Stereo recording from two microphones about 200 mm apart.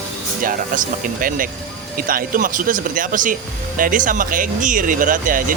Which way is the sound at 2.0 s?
45° right (ahead or behind).